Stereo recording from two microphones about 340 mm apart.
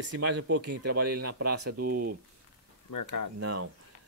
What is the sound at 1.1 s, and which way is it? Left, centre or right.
Speech, right.